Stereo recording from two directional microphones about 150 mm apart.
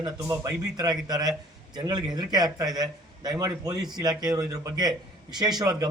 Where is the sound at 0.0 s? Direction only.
25° right (ahead or behind).